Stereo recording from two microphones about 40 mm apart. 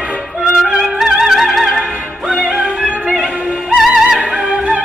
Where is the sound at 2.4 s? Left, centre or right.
Right.